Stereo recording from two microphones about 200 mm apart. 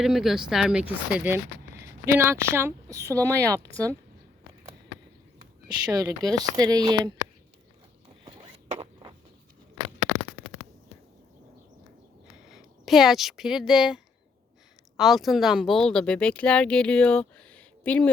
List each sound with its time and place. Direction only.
0.0 s a woman's voice: centre (ahead or behind)
5.6 s speech: 20° right (ahead or behind)
8.7 s a sound: 25° right (ahead or behind)
12.5 s speech: centre (ahead or behind)